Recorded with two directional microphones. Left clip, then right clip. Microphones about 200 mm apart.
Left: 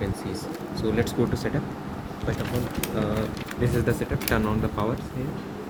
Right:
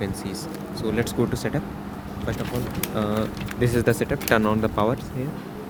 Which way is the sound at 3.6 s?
50° right (ahead or behind).